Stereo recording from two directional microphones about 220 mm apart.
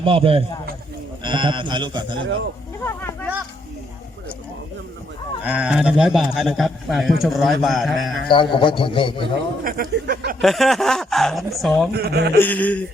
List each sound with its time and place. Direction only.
0.0 s a man's voice: 25° right (ahead or behind)
5.4 s a man's voice: 5° right (ahead or behind)
8.3 s a man's voice: 20° left (ahead or behind)
9.6 s speech: 40° right (ahead or behind)
10.4 s a man's voice: centre (ahead or behind)
11.9 s a man's voice: 45° right (ahead or behind)
12.4 s a sound: 5° left (ahead or behind)